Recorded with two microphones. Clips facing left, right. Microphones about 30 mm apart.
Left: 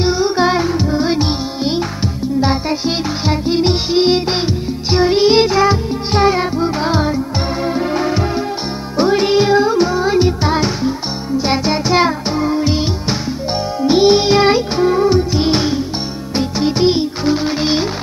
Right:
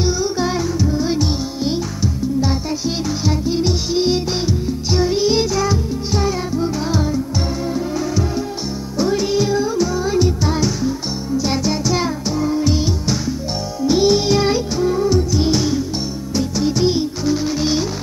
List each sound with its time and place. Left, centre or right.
0.0 s music: left
3.3 s music: left
13.8 s music: left